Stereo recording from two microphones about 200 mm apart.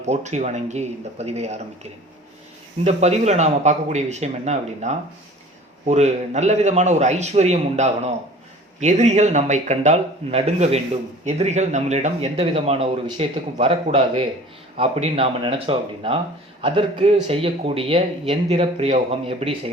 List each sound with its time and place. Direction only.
0.0 s a man's voice: 35° right (ahead or behind)